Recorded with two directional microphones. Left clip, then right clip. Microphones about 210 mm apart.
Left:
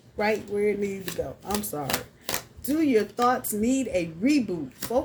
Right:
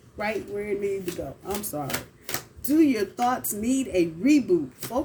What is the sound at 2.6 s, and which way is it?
Speech, 25° left (ahead or behind).